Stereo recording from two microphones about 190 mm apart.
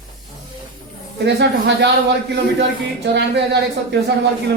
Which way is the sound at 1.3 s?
60° right (ahead or behind).